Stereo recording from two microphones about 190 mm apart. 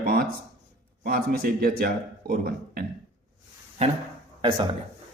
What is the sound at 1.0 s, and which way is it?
A man's voice, 50° right (ahead or behind).